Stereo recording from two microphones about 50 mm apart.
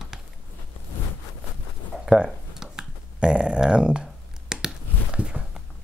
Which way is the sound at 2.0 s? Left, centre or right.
Centre.